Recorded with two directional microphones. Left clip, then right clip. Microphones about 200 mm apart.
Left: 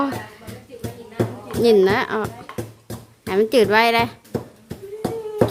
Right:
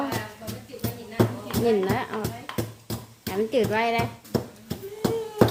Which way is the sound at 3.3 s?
60° left (ahead or behind).